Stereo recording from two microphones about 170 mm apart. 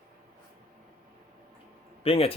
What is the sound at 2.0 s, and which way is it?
Speech, 35° left (ahead or behind).